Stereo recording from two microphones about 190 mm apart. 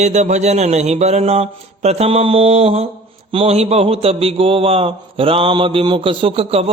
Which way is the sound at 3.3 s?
30° right (ahead or behind).